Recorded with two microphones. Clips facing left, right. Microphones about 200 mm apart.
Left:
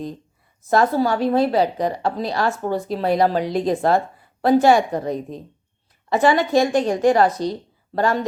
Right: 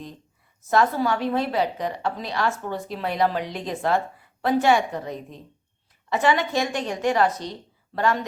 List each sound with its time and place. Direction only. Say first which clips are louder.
0.7 s a woman's voice: left 4 dB; 35° left (ahead or behind)